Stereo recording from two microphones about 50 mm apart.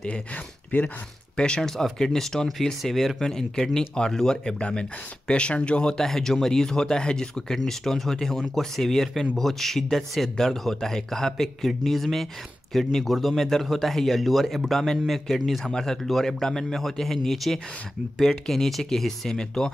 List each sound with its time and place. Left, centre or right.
0.7 s speech: left
1.3 s speech: centre